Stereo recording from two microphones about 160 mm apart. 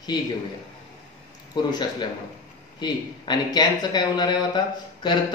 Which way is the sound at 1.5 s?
25° left (ahead or behind).